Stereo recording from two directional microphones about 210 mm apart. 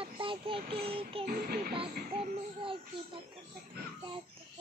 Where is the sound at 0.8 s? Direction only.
25° right (ahead or behind).